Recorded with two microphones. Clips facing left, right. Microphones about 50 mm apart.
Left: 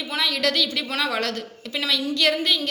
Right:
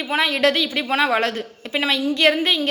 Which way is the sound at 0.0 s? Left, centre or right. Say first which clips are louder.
Right 5 dB; right.